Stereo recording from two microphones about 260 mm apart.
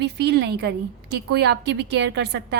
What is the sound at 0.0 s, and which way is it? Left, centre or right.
A woman's voice, right.